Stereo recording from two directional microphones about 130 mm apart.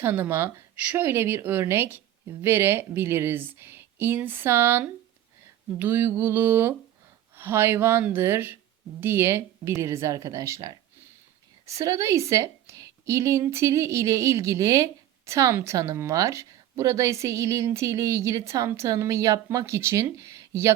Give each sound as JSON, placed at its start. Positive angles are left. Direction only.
{"t": 0.0, "sound": "a woman's voice", "side_deg": -15}